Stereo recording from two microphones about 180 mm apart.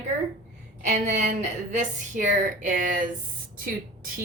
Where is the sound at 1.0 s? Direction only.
45° right (ahead or behind).